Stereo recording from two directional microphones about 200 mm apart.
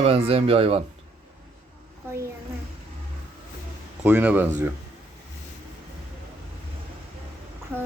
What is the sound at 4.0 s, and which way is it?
Speech, 10° right (ahead or behind).